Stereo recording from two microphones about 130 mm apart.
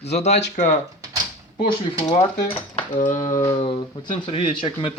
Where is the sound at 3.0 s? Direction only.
80° left.